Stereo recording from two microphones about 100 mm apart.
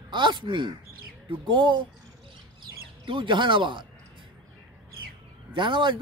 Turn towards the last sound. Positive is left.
turn(degrees=-55)  # may be behind; listen again after turning